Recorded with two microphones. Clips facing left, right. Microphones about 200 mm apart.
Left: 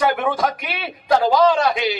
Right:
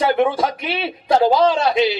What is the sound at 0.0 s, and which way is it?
A man's voice, 30° right (ahead or behind).